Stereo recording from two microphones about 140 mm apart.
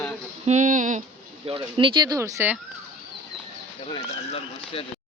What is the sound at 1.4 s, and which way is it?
Speech, 40° right (ahead or behind).